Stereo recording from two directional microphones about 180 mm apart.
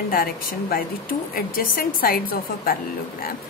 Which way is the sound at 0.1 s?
50° left (ahead or behind).